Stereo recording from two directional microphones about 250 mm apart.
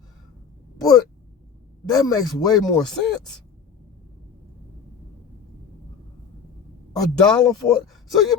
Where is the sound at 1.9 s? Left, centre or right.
Centre.